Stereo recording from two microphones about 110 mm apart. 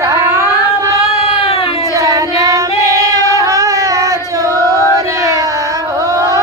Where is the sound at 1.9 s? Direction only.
30° right (ahead or behind).